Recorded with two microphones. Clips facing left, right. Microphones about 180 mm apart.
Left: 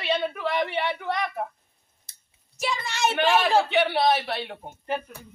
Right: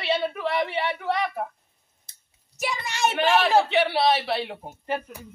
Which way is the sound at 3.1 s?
Centre (ahead or behind).